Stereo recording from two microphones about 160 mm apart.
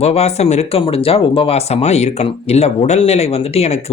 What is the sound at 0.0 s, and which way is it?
Speech, 40° left (ahead or behind).